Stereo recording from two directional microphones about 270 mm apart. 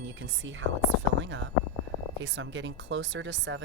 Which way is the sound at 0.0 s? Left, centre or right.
Right.